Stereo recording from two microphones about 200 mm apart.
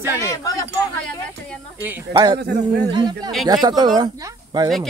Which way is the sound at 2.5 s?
50° right (ahead or behind).